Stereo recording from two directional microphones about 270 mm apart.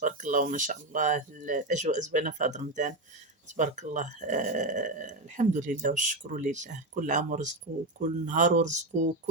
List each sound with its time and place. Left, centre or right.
0.0 s speech: right